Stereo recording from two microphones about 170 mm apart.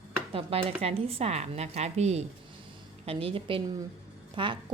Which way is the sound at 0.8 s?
35° right (ahead or behind).